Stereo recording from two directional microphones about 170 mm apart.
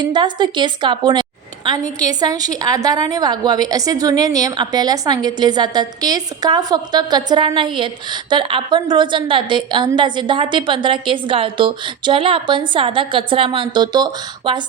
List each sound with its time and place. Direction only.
0.0 s a woman's voice: 25° right (ahead or behind)